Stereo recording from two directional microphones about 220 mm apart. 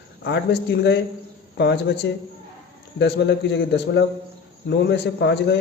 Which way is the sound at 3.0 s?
50° left (ahead or behind).